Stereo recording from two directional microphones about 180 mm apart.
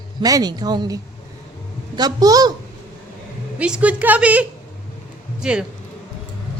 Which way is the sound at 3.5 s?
5° right (ahead or behind).